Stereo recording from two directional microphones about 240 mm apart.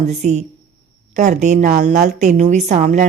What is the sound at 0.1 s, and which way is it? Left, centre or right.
A woman's voice, right.